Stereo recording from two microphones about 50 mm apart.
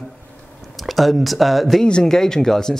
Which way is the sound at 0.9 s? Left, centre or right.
Centre.